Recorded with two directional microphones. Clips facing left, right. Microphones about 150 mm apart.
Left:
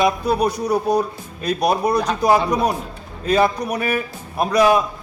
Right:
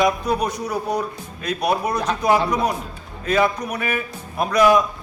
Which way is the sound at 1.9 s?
10° left (ahead or behind).